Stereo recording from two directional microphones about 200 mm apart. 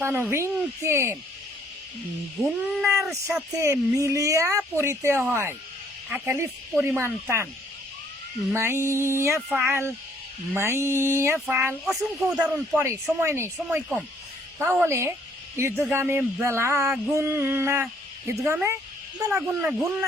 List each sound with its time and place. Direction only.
0.0 s speech: 10° right (ahead or behind)
2.4 s speech: centre (ahead or behind)
3.6 s speech: 15° right (ahead or behind)
8.5 s speech: 15° right (ahead or behind)